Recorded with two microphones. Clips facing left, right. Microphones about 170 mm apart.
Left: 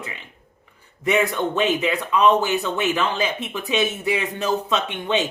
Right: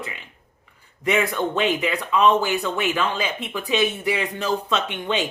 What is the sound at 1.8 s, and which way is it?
Speech, 20° left (ahead or behind).